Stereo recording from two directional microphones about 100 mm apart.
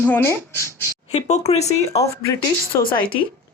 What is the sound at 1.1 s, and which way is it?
Speech, 90° left.